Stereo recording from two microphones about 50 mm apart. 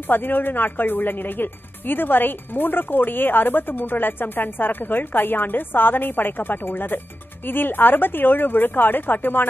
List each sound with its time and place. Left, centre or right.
0.1 s speech: left